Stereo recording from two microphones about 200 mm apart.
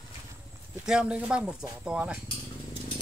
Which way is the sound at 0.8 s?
5° right (ahead or behind).